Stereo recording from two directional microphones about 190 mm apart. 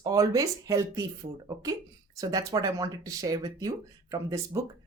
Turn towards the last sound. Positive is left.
turn(degrees=-20)  # may be behind; listen again after turning